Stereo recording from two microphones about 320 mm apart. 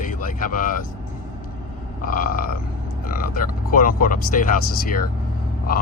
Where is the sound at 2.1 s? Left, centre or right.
Left.